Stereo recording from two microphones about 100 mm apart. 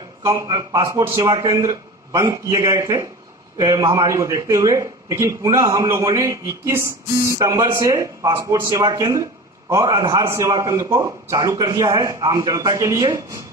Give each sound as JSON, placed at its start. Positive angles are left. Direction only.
{"t": 0.5, "sound": "a man's voice", "side_deg": -40}